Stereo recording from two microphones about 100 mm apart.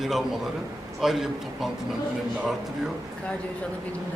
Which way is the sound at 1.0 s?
Centre (ahead or behind).